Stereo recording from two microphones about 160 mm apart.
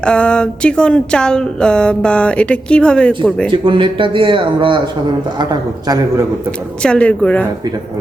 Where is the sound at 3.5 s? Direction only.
30° right (ahead or behind).